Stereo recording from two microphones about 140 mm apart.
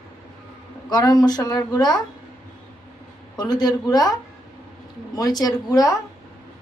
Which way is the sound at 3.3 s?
30° left (ahead or behind).